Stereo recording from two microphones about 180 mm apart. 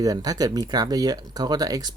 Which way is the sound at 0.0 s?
20° right (ahead or behind).